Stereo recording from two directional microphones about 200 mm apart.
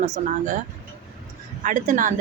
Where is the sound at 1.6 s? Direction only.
40° right (ahead or behind).